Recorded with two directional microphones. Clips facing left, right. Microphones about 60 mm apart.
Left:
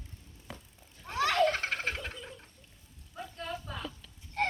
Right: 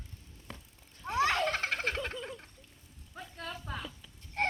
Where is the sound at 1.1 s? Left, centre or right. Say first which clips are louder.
Left 2 dB; right.